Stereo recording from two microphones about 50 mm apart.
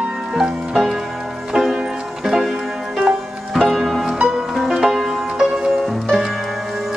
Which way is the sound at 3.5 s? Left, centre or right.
Centre.